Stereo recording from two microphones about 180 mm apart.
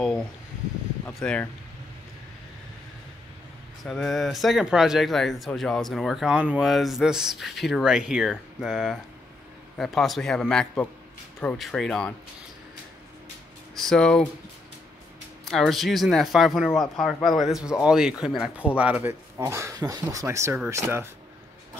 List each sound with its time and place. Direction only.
1.0 s speech: 10° left (ahead or behind)
3.8 s speech: centre (ahead or behind)
13.7 s speech: 5° left (ahead or behind)
15.4 s speech: centre (ahead or behind)